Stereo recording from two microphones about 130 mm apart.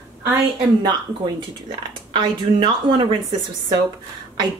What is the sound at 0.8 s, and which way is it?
Speech, 35° right (ahead or behind).